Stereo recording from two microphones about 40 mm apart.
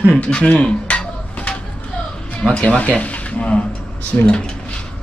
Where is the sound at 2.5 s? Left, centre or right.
Left.